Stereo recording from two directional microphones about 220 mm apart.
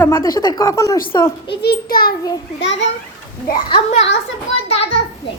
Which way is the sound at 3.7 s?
30° left (ahead or behind).